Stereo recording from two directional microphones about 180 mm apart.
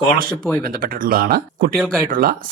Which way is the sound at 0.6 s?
55° right (ahead or behind).